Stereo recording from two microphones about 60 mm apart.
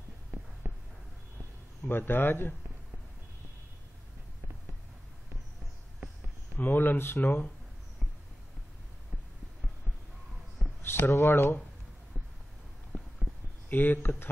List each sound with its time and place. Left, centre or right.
0.3 s a sound: right
1.9 s speech: left
6.6 s speech: left
10.8 s speech: left
12.9 s a sound: left
13.7 s speech: left